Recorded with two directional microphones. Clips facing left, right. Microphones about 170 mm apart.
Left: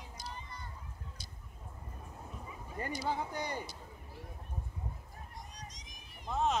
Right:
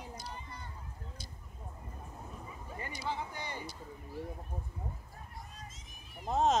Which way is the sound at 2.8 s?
45° left (ahead or behind).